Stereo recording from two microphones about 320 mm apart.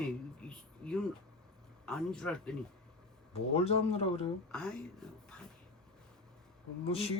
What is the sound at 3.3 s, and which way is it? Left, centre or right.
Speech, centre.